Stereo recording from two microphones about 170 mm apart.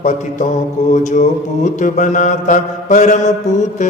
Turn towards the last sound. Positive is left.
turn(degrees=45)  # may be behind; listen again after turning